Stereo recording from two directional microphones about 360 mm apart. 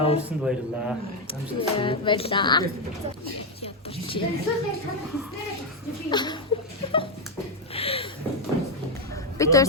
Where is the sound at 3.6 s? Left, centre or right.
Centre.